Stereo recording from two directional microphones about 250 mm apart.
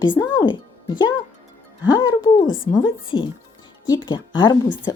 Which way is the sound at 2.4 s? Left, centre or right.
Left.